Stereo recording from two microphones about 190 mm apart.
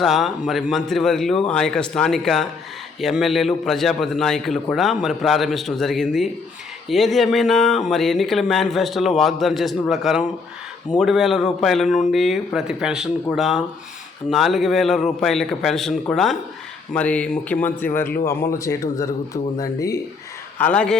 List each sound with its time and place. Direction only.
0.0 s speech: centre (ahead or behind); by 20.0 s 15° left (ahead or behind)
20.6 s speech: 5° left (ahead or behind)